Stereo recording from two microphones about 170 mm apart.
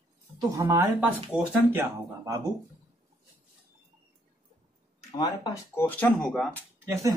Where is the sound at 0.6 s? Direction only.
20° right (ahead or behind).